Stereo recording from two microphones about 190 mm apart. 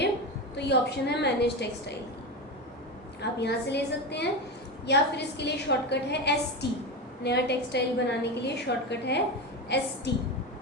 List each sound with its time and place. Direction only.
0.5 s a woman's voice: 65° left (ahead or behind)
3.2 s a woman's voice: 60° left (ahead or behind)